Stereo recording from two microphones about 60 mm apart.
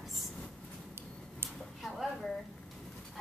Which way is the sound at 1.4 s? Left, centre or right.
Right.